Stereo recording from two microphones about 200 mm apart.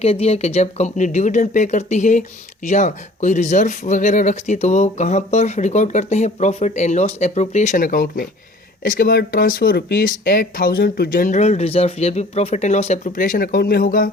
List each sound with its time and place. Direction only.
0.0 s speech: 30° left (ahead or behind); by 14.1 s 45° left (ahead or behind)